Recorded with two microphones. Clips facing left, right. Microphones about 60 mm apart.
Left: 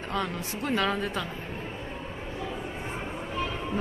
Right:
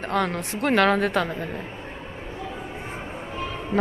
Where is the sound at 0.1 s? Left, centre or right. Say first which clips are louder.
Right 6 dB; right.